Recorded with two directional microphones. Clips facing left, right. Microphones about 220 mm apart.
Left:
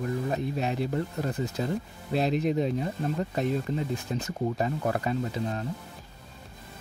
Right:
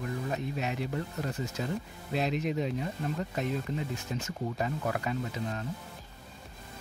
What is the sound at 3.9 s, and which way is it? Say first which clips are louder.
Speech: left 5 dB; 35° left (ahead or behind).